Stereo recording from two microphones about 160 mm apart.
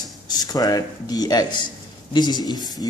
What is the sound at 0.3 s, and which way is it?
Speech, 25° left (ahead or behind).